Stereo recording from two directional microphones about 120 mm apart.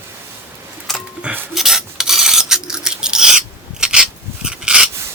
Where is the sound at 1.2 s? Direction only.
15° right (ahead or behind).